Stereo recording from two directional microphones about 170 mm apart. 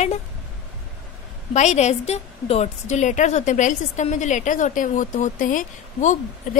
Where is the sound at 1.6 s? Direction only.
45° left (ahead or behind).